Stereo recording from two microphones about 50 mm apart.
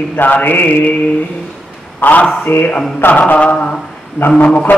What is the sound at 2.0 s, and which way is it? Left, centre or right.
Mantra, left.